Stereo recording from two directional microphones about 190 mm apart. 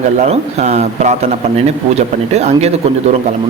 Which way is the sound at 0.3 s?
35° right (ahead or behind).